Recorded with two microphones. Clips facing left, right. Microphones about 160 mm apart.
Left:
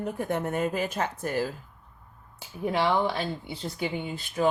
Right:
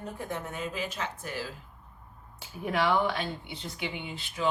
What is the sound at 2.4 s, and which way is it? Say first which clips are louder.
Speech: left 2 dB; 25° left (ahead or behind).